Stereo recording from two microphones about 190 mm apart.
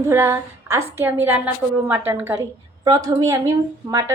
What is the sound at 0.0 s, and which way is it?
A woman's voice, 15° right (ahead or behind).